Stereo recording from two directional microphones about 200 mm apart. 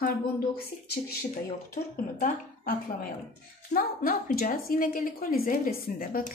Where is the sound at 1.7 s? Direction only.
40° left (ahead or behind).